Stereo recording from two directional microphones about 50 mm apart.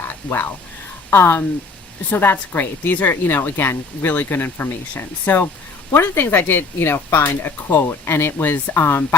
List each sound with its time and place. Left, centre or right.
1.1 s speech: left
2.0 s speech: left